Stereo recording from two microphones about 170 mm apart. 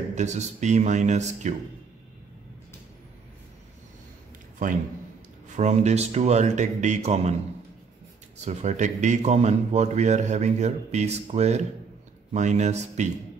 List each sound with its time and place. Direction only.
0.1 s a man's voice: 45° right (ahead or behind)
4.6 s a man's voice: 50° right (ahead or behind)
8.5 s a man's voice: 45° right (ahead or behind)